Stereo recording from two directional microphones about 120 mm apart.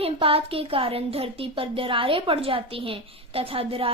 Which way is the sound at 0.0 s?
55° right (ahead or behind).